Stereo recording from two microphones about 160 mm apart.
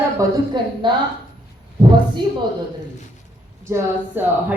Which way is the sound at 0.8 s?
30° right (ahead or behind).